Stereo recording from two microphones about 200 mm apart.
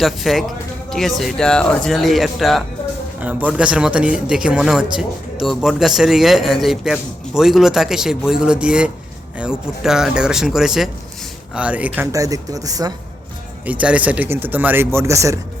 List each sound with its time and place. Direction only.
0.0 s speech: centre (ahead or behind); by 12.9 s 15° right (ahead or behind)
13.7 s speech: 5° right (ahead or behind)